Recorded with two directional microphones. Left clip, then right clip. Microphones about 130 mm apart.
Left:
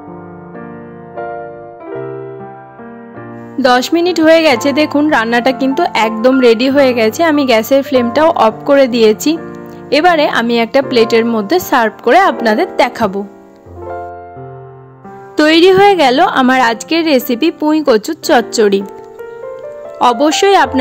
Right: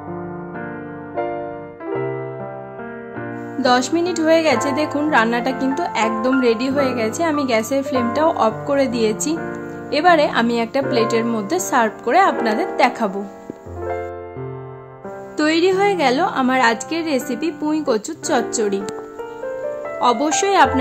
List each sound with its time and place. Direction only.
3.5 s speech: 55° left (ahead or behind)
15.3 s a woman's voice: 65° left (ahead or behind)
20.0 s speech: 55° left (ahead or behind)